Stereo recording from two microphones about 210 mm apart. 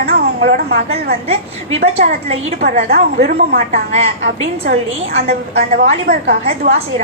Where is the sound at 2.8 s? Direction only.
45° right (ahead or behind).